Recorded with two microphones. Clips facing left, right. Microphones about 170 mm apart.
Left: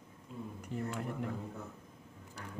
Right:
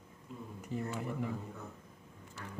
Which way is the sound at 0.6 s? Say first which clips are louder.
Right 1 dB; 5° right (ahead or behind).